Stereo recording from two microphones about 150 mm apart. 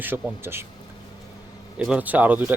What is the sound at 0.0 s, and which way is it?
Speech, 15° right (ahead or behind).